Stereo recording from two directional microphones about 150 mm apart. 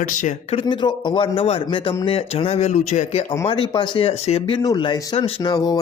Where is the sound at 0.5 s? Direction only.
30° left (ahead or behind); by 3.2 s 50° left (ahead or behind).